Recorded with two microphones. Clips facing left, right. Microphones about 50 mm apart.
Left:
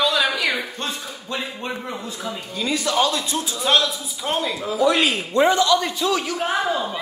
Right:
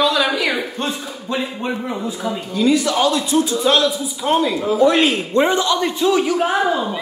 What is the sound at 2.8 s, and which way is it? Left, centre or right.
Speech, right.